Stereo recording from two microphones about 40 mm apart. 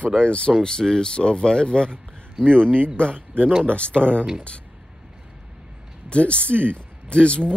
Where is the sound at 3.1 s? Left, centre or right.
Right.